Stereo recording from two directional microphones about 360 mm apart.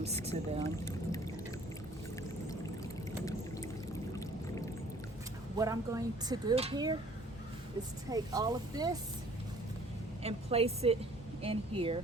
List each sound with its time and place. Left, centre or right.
0.0 s speech: centre
0.6 s vehicle: centre
5.5 s speech: centre
8.1 s speech: centre
10.2 s speech: centre